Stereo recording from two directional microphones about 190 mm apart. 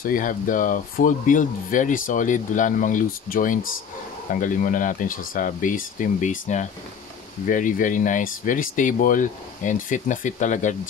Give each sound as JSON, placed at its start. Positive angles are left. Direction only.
{"t": 0.0, "sound": "speech", "side_deg": 45}